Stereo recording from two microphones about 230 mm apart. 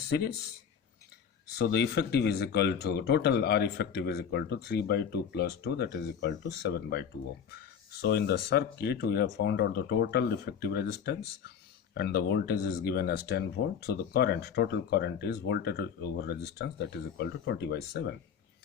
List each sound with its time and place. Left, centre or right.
0.1 s speech: left
1.5 s speech: left